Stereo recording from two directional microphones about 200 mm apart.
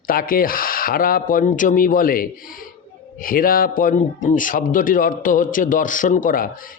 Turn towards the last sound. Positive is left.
turn(degrees=45)  # may be behind; listen again after turning